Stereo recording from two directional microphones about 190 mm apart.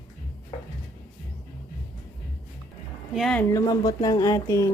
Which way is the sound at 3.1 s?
Centre (ahead or behind).